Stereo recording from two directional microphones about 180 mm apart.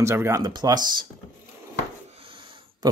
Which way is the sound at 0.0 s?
15° right (ahead or behind).